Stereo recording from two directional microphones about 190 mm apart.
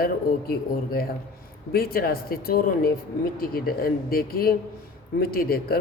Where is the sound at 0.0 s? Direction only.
55° left (ahead or behind).